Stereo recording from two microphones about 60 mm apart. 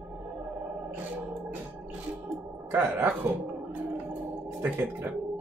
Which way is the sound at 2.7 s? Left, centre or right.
Right.